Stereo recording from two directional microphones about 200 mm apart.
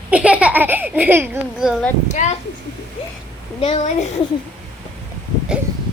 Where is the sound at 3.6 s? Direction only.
30° left (ahead or behind).